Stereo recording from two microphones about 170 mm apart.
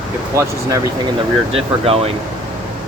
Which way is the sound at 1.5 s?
35° right (ahead or behind).